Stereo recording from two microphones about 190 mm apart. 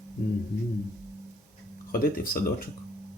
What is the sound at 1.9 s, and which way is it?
Speech, 50° left (ahead or behind).